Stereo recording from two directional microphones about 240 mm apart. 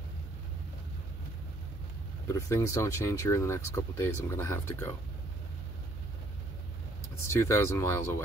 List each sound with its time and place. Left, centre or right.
2.2 s speech: centre
7.2 s speech: centre